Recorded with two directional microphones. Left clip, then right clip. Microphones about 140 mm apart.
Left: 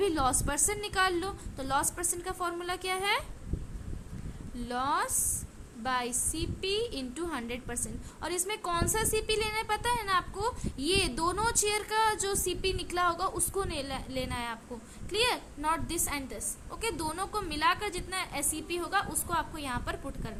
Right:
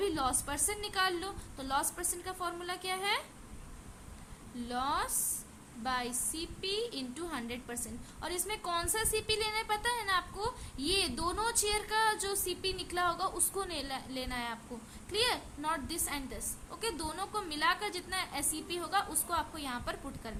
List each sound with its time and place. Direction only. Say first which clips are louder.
0.0 s a woman's voice: left 5 dB; 30° left (ahead or behind)
4.6 s a woman's voice: left 4 dB; 25° left (ahead or behind)